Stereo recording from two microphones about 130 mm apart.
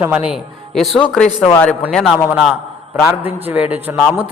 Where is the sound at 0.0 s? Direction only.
10° right (ahead or behind).